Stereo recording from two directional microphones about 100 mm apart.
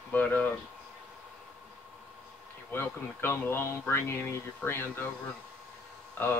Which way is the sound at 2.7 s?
20° left (ahead or behind).